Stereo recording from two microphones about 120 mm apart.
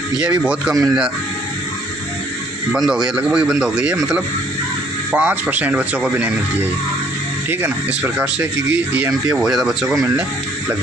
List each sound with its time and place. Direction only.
0.2 s speech: 10° right (ahead or behind)
2.7 s speech: 5° right (ahead or behind)
5.1 s speech: 15° right (ahead or behind)
9.4 s speech: centre (ahead or behind)